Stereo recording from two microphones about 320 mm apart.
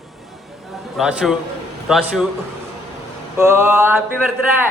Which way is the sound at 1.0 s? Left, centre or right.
Centre.